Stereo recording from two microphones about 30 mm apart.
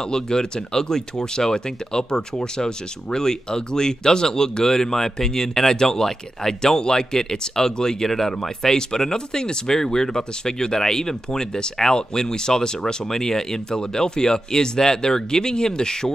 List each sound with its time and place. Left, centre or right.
0.1 s speech: left